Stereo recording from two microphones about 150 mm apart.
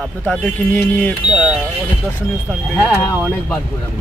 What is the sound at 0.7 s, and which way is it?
Speech, 15° left (ahead or behind).